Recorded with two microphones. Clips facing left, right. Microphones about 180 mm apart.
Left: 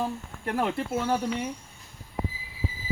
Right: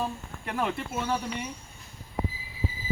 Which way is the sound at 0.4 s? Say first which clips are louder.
Left 3 dB; 45° left (ahead or behind).